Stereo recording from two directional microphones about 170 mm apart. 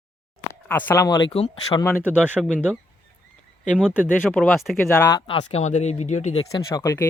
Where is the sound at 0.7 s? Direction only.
10° left (ahead or behind); by 1.8 s 30° left (ahead or behind).